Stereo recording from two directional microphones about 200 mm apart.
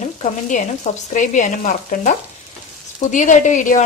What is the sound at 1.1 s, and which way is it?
Speech, 40° left (ahead or behind).